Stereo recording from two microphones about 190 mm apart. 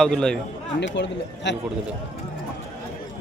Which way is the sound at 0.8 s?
70° left (ahead or behind).